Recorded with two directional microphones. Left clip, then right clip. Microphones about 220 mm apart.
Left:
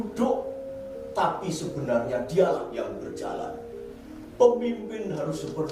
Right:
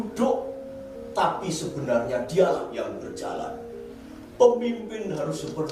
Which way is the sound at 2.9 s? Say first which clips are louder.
Right 1 dB; 15° left (ahead or behind).